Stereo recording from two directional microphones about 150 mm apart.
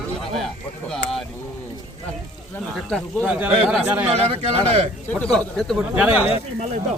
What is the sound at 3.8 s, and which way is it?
Speech, 10° right (ahead or behind).